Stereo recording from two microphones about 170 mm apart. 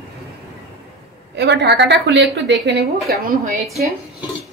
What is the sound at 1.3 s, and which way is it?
A woman's voice, 90° right.